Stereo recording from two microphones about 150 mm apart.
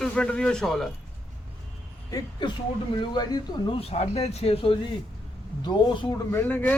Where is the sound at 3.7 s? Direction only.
40° left (ahead or behind).